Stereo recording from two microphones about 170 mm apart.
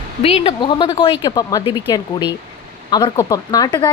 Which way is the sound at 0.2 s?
35° left (ahead or behind).